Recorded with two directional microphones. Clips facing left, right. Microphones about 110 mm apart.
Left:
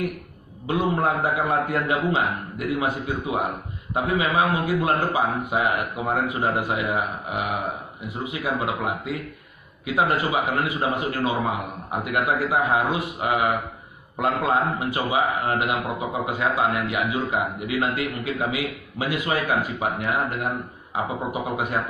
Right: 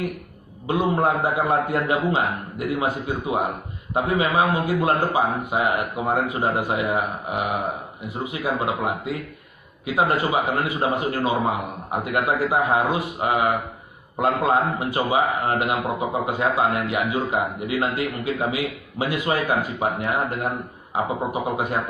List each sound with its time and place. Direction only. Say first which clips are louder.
0.7 s speech: right 2 dB; 25° right (ahead or behind)